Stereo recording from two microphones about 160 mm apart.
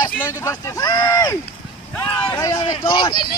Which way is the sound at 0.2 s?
20° left (ahead or behind).